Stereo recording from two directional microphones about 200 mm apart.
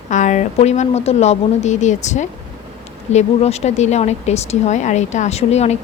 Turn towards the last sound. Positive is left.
turn(degrees=30)  # may be behind; listen again after turning